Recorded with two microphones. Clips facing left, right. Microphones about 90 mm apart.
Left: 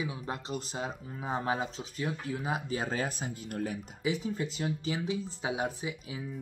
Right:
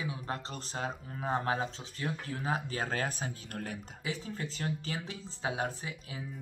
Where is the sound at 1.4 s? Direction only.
15° left (ahead or behind).